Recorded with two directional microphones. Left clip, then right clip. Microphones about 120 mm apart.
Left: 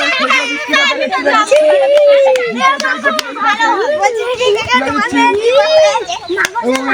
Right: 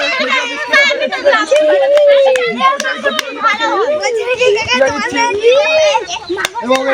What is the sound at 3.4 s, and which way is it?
Speech, 5° left (ahead or behind).